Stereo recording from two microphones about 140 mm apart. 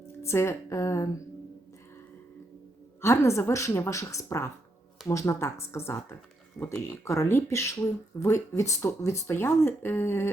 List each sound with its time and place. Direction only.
0.2 s a woman's voice: 20° left (ahead or behind)
3.0 s a woman's voice: 20° left (ahead or behind)